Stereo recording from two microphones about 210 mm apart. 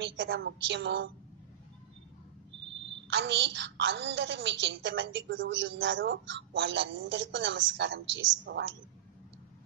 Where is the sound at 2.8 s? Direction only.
60° right (ahead or behind).